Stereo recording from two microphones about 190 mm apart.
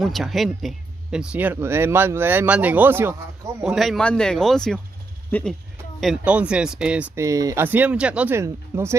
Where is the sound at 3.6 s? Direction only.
Centre (ahead or behind).